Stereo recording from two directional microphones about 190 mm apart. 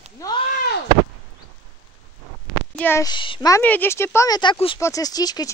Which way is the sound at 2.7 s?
15° left (ahead or behind).